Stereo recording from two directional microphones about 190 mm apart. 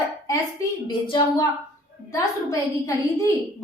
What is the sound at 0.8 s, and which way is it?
A woman's voice, 25° left (ahead or behind).